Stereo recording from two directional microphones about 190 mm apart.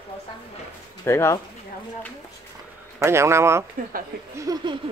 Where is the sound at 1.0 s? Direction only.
15° left (ahead or behind).